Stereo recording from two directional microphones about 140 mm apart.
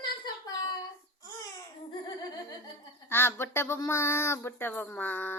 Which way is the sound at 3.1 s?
15° left (ahead or behind).